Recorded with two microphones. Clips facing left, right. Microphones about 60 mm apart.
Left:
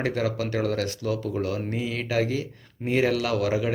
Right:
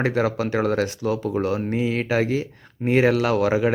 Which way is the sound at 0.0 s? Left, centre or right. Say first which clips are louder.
Right 4 dB; right.